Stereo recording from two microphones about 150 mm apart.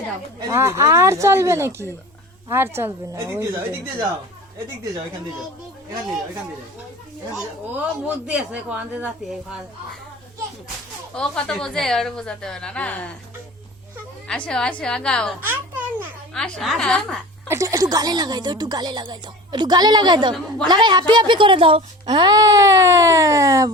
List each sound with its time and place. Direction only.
0.5 s a woman's voice: 20° right (ahead or behind)
8.0 s a woman's voice: 5° right (ahead or behind)
11.1 s a woman's voice: 5° left (ahead or behind)
14.3 s a woman's voice: 5° left (ahead or behind)
15.4 s a sound: 10° right (ahead or behind)
16.3 s a woman's voice: 5° left (ahead or behind)
17.5 s a woman's voice: 20° right (ahead or behind)